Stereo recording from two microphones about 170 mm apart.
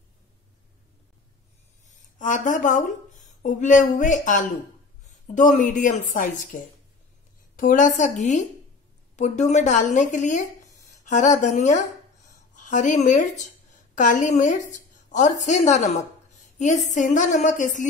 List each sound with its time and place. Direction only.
1.9 s a woman's voice: 50° left (ahead or behind)